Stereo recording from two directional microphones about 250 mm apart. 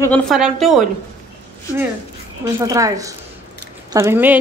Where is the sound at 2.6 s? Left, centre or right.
Centre.